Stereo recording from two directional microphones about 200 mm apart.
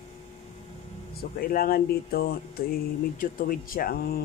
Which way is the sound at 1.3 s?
45° left (ahead or behind).